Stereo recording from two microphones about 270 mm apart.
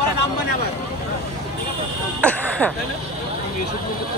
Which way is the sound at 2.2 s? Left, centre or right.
Centre.